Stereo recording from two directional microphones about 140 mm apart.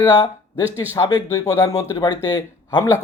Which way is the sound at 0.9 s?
25° left (ahead or behind).